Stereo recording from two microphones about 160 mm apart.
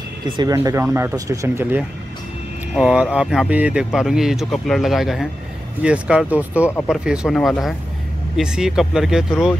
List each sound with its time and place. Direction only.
0.4 s speech: 20° right (ahead or behind); by 9.6 s 5° right (ahead or behind)